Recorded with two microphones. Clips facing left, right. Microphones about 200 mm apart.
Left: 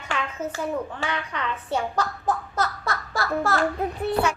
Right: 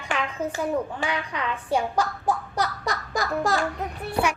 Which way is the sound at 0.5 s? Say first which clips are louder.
Right 2 dB; 15° right (ahead or behind).